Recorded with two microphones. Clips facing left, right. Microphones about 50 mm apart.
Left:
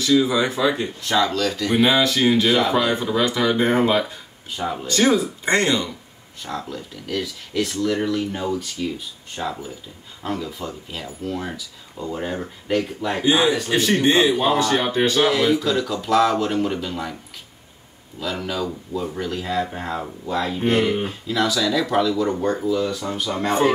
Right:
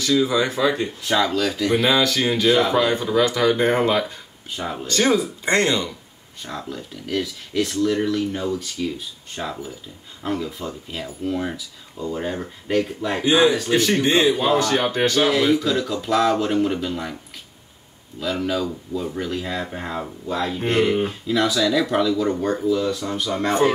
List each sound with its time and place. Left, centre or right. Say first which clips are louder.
0.0 s speech: left 1 dB; centre
0.6 s speech: even; centre
1.8 s speech: left 4 dB; centre
4.6 s speech: left 2 dB; centre
6.4 s speech: left 1 dB; centre
15.2 s speech: even; centre
18.2 s speech: right 2 dB; centre